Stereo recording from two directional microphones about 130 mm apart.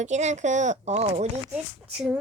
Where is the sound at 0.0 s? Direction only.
65° right (ahead or behind).